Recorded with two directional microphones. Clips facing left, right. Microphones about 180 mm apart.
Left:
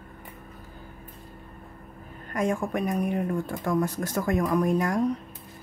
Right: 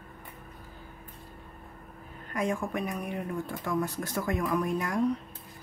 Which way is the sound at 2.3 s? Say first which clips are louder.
Left 4 dB; 45° left (ahead or behind).